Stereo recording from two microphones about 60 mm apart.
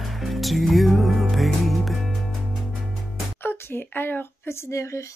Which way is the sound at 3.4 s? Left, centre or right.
Left.